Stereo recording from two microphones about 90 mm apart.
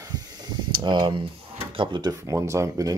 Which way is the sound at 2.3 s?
35° right (ahead or behind).